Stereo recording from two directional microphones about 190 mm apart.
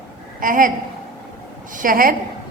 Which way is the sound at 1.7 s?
45° right (ahead or behind).